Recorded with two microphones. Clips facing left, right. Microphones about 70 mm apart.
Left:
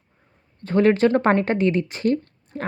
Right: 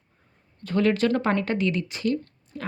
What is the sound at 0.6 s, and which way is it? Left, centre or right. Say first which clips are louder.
A woman's voice: left 5 dB; left.